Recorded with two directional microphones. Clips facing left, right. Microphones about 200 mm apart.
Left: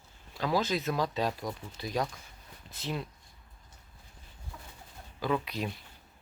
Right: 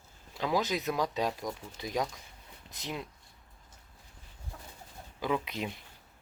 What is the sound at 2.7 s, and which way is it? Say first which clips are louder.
Speech: left 3 dB; 15° right (ahead or behind).